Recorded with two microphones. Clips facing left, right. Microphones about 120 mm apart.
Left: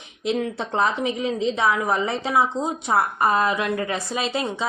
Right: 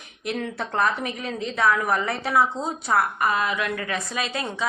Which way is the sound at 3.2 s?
35° left (ahead or behind).